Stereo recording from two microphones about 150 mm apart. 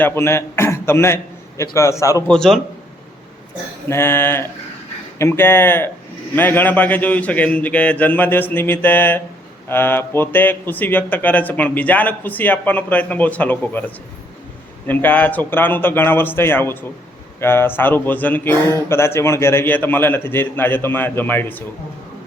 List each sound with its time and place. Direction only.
0.0 s a man's voice: 15° left (ahead or behind)
2.2 s a man's voice: 5° left (ahead or behind)
3.8 s speech: 15° left (ahead or behind)